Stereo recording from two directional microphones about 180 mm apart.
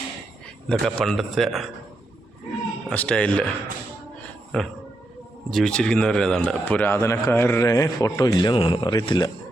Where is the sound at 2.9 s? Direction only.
5° left (ahead or behind).